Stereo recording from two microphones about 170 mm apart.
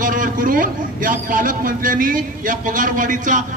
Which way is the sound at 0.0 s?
50° right (ahead or behind).